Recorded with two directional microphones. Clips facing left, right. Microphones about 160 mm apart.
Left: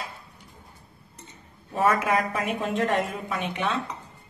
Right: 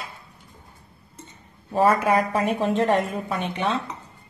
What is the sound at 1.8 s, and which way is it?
Speech, 30° right (ahead or behind).